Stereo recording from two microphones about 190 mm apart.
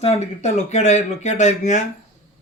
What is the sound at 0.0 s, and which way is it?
Speech, 35° left (ahead or behind).